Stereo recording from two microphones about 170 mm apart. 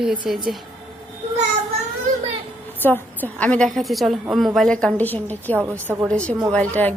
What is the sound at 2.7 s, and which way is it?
A woman's voice, 10° left (ahead or behind).